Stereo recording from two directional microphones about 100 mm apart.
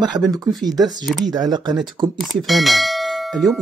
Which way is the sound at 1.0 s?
Centre (ahead or behind).